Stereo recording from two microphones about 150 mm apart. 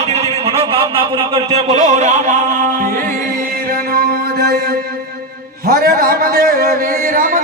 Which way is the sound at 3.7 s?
80° right.